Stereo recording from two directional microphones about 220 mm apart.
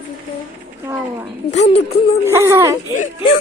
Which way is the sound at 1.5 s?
30° left (ahead or behind).